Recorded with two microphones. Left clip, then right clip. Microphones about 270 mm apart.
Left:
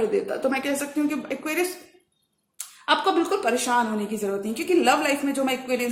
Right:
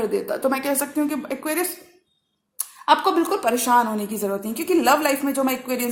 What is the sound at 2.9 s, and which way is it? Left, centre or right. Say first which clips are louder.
A woman's voice: right 3 dB; right.